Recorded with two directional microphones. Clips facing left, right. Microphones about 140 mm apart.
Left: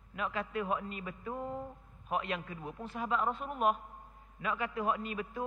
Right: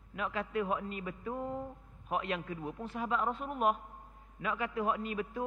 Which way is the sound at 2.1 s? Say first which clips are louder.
Right 1 dB; 20° right (ahead or behind).